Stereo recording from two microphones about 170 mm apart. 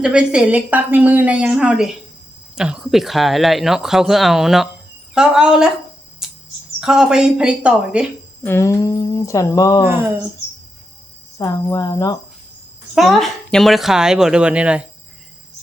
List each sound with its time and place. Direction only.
0.0 s a woman's voice: 5° right (ahead or behind)
6.2 s bird: 5° right (ahead or behind)
6.7 s speech: 5° right (ahead or behind)
8.4 s speech: 15° left (ahead or behind)
9.8 s a woman's voice: 15° right (ahead or behind)
11.3 s speech: 20° left (ahead or behind)
12.9 s speech: centre (ahead or behind)